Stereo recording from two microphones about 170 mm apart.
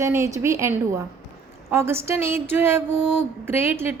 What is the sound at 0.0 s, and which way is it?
A woman's voice, 15° right (ahead or behind).